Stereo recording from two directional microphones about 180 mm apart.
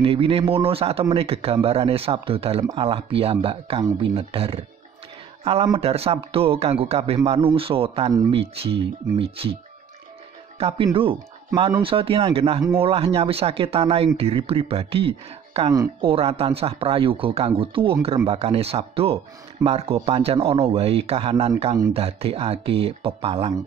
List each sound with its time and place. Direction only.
0.0 s speech: 30° right (ahead or behind)
8.1 s speech: 20° right (ahead or behind)
8.4 s speech: 30° right (ahead or behind)
10.6 s speech: 30° right (ahead or behind)